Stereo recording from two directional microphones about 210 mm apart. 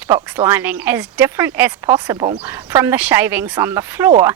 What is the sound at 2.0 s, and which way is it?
Speech, 25° right (ahead or behind).